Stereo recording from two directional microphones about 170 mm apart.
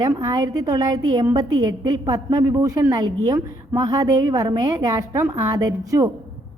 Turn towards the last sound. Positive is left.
turn(degrees=-20)  # may be behind; listen again after turning